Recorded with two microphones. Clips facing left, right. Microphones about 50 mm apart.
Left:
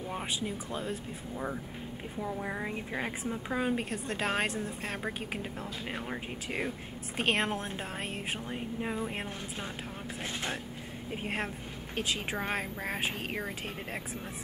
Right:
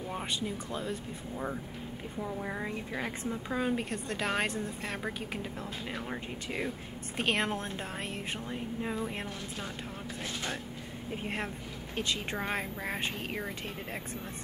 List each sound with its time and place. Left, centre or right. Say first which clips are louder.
0.1 s a woman's voice: even; centre
2.1 s a woman's voice: left 1 dB; centre
5.4 s speech: even; left
7.2 s a woman's voice: left 1 dB; centre
11.1 s a woman's voice: left 1 dB; centre